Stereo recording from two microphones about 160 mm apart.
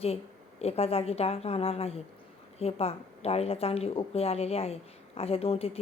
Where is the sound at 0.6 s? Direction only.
40° left (ahead or behind).